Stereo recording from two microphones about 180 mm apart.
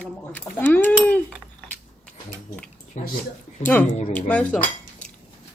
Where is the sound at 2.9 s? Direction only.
40° left (ahead or behind).